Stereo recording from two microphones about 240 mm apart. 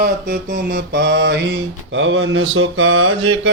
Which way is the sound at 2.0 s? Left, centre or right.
Right.